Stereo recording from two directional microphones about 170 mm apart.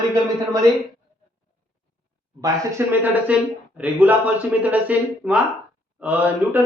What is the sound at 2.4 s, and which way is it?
Speech, 15° right (ahead or behind).